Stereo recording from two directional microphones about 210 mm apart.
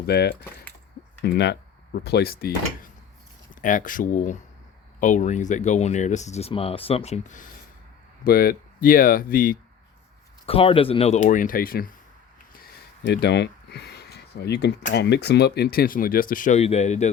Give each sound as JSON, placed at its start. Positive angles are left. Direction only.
{"t": 0.0, "sound": "speech", "side_deg": 50}
{"t": 10.4, "sound": "speech", "side_deg": 25}
{"t": 13.1, "sound": "speech", "side_deg": 55}